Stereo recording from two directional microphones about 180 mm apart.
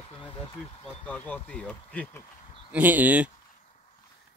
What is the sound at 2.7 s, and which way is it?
Speech, 10° right (ahead or behind).